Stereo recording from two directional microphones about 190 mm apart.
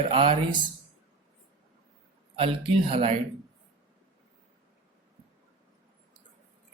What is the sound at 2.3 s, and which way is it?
Speech, 30° right (ahead or behind).